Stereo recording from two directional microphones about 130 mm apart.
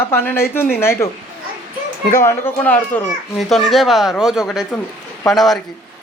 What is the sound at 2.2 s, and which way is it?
Speech, 20° left (ahead or behind).